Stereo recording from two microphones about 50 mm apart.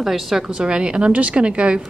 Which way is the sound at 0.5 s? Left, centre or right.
Centre.